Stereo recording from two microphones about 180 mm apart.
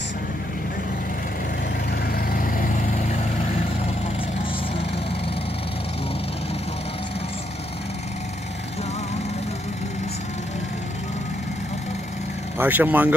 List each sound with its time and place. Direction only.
1.9 s vehicle: 55° left (ahead or behind)
12.5 s speech: 10° right (ahead or behind)